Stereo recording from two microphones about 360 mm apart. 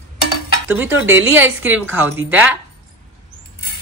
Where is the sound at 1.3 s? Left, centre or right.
Centre.